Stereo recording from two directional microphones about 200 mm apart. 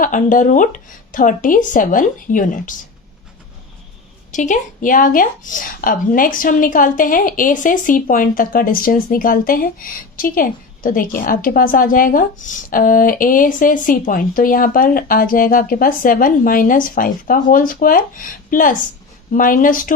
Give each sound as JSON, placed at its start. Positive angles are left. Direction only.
{"t": 0.0, "sound": "speech", "side_deg": 40}
{"t": 4.3, "sound": "speech", "side_deg": 40}